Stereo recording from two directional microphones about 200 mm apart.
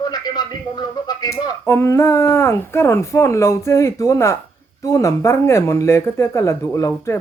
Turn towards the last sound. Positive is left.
turn(degrees=15)  # may be behind; listen again after turning